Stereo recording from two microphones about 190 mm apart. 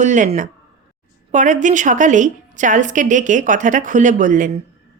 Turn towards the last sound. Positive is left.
turn(degrees=-45)  # may be behind; listen again after turning